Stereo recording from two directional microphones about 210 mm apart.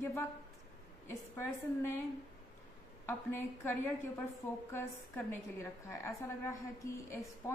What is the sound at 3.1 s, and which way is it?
Speech, 10° left (ahead or behind).